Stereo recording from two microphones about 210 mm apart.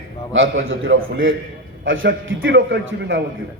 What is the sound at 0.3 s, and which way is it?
A man's voice, 70° right (ahead or behind).